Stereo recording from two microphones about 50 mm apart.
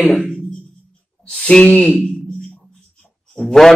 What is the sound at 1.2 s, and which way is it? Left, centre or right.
Speech, centre.